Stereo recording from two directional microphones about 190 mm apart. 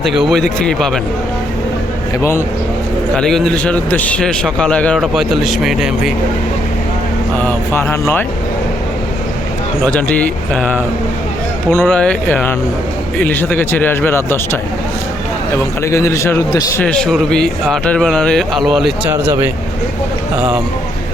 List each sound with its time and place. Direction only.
0.0 s a man's voice: centre (ahead or behind)
3.2 s a man's voice: centre (ahead or behind)
7.4 s speech: 10° left (ahead or behind)
9.8 s speech: 10° left (ahead or behind)
15.8 s speech: 15° left (ahead or behind)
16.8 s a man's voice: 5° left (ahead or behind)
19.1 s speech: 15° right (ahead or behind)